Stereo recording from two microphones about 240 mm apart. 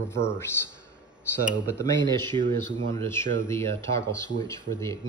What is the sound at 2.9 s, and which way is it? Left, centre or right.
Speech, centre.